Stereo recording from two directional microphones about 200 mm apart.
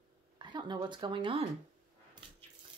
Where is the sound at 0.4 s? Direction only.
20° right (ahead or behind).